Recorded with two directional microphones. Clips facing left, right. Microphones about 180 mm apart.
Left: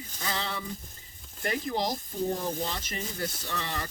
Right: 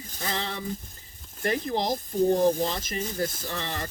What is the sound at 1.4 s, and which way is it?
Speech, 45° right (ahead or behind).